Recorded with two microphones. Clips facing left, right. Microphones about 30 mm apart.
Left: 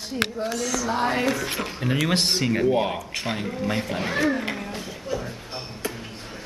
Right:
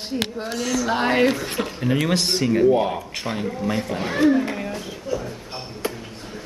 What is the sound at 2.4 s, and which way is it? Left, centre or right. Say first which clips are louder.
Speech: right 7 dB; centre.